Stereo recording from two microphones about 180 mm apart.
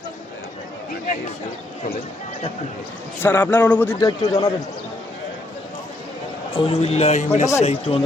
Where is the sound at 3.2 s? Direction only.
10° left (ahead or behind).